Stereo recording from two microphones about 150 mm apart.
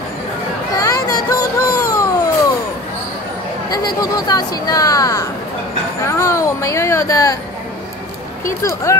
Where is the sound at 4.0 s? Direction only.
25° left (ahead or behind).